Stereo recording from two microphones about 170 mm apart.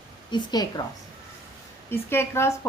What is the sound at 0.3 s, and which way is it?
Speech, 25° left (ahead or behind).